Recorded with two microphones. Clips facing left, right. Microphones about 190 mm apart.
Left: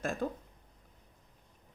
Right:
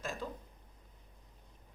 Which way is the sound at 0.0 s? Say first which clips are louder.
Left 7 dB; 55° left (ahead or behind).